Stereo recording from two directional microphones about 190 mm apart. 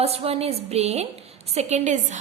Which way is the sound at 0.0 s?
30° right (ahead or behind).